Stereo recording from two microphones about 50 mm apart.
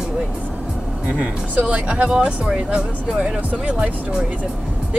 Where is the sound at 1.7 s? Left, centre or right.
Right.